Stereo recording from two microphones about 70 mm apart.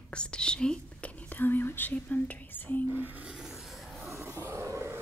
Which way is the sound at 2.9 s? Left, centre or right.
Right.